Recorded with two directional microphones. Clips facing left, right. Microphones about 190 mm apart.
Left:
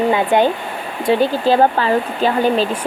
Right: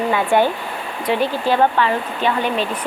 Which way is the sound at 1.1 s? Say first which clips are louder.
Left 4 dB; 30° left (ahead or behind).